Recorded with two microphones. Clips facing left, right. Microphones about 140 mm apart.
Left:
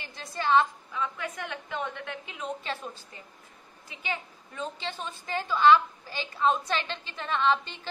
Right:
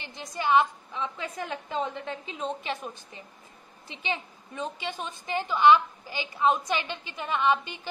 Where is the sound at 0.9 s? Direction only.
30° right (ahead or behind).